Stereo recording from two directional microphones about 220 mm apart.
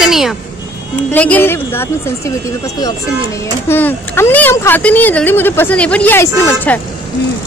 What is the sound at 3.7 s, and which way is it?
Speech, 10° left (ahead or behind).